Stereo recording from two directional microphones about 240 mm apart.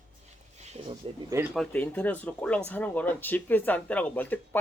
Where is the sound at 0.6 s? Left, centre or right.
Right.